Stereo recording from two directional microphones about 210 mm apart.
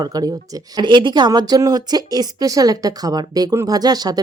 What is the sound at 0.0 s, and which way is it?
Speech, 20° right (ahead or behind).